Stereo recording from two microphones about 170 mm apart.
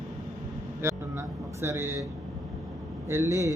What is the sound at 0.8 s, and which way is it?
Music, 15° right (ahead or behind).